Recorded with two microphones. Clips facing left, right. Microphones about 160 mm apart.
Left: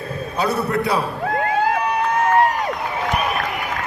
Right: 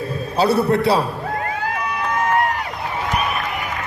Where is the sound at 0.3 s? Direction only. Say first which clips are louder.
Right 4 dB; 30° right (ahead or behind).